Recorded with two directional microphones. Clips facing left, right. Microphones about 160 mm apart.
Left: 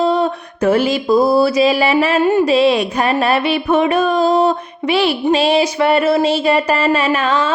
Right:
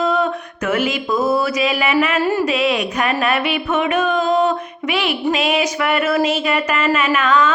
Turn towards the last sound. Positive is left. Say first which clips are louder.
# even
turn(degrees=30)  # may be behind; listen again after turning